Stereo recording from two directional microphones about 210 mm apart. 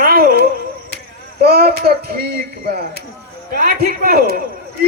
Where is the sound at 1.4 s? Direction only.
45° right (ahead or behind).